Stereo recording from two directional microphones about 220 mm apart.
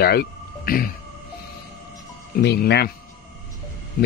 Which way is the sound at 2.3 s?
45° left (ahead or behind).